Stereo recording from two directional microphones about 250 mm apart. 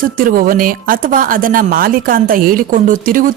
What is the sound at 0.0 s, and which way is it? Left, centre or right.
Speech, right.